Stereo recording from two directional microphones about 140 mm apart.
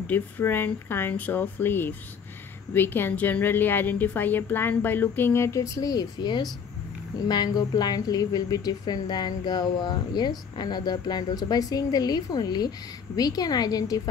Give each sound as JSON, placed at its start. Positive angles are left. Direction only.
{"t": 0.0, "sound": "a woman's voice", "side_deg": 15}